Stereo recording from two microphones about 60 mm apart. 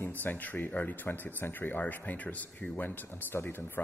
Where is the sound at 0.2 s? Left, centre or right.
Left.